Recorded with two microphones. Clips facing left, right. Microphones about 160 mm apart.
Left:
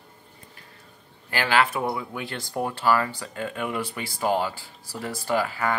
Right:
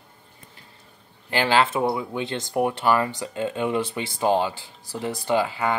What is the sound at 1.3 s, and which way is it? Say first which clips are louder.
Speech: right 2 dB; 25° right (ahead or behind).